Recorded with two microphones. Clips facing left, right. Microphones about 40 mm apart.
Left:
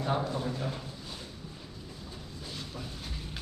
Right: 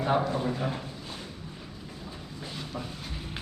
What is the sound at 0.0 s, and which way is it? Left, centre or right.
Speech, right.